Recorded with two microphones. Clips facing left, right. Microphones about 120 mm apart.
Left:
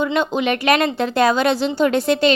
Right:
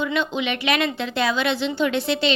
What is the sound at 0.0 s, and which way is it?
A woman's voice, 40° left (ahead or behind).